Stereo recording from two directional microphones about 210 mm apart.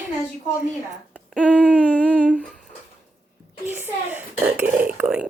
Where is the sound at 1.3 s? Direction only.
5° left (ahead or behind).